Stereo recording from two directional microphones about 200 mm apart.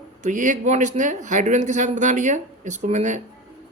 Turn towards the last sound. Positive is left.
turn(degrees=-35)  # may be behind; listen again after turning